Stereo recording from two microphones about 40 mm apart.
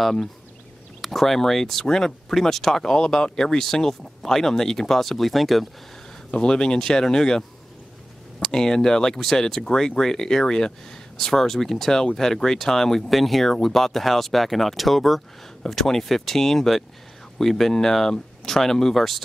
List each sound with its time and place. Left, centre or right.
0.0 s speech: centre
6.3 s speech: centre